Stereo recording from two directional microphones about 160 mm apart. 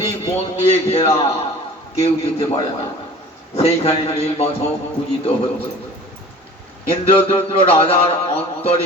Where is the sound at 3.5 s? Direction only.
40° left (ahead or behind).